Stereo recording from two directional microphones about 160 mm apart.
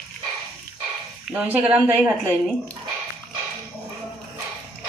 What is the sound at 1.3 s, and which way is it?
Speech, 10° right (ahead or behind).